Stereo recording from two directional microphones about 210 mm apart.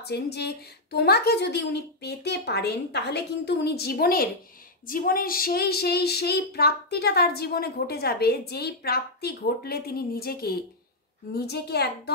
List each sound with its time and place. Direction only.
0.0 s child singing: 50° left (ahead or behind)